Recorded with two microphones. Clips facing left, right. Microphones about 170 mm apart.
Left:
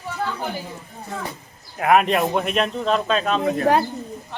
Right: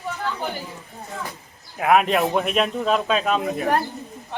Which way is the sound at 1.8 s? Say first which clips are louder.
Left 1 dB; centre (ahead or behind).